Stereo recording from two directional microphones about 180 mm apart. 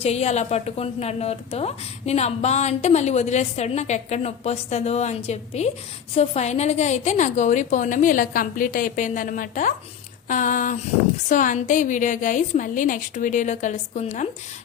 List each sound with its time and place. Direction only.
0.0 s a woman's voice: 35° left (ahead or behind)